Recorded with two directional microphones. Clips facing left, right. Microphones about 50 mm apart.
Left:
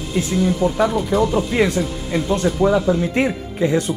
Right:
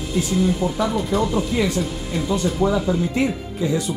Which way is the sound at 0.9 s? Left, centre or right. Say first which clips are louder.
Left 3 dB; centre.